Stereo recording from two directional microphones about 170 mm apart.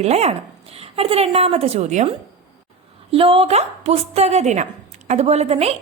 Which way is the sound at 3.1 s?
35° right (ahead or behind).